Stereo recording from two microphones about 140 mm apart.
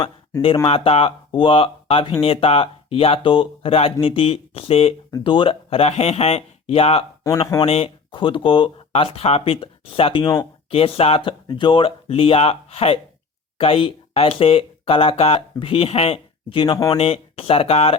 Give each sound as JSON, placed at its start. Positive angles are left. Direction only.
{"t": 0.4, "sound": "speech", "side_deg": 40}
{"t": 7.3, "sound": "speech", "side_deg": 20}
{"t": 7.6, "sound": "speech", "side_deg": 45}